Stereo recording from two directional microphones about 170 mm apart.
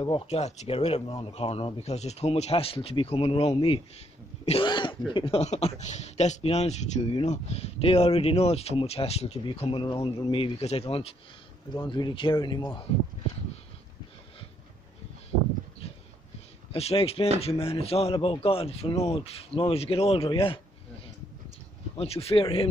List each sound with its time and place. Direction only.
0.0 s speech: 30° left (ahead or behind)
11.7 s speech: 25° left (ahead or behind)
16.7 s speech: 35° left (ahead or behind)
21.9 s speech: 35° left (ahead or behind)